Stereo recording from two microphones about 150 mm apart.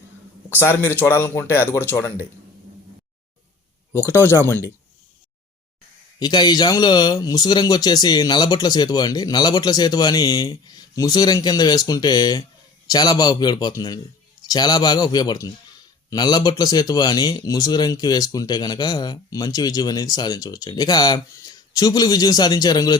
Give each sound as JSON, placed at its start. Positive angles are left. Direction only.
{"t": 0.5, "sound": "speech", "side_deg": 15}
{"t": 3.9, "sound": "speech", "side_deg": 15}
{"t": 6.1, "sound": "a man's voice", "side_deg": 30}